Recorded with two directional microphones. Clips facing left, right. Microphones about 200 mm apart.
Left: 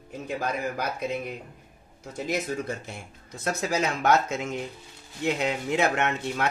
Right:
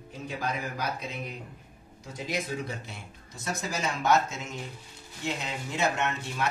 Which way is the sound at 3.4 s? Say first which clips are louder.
Left 5 dB; 60° left (ahead or behind).